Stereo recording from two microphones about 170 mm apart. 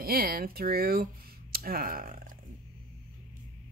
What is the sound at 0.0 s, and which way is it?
Speech, 60° right (ahead or behind).